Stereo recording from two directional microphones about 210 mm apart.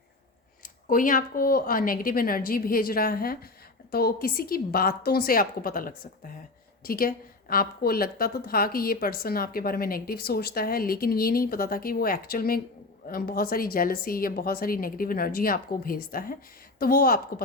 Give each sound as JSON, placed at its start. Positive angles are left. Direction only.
{"t": 0.6, "sound": "a woman's voice", "side_deg": 40}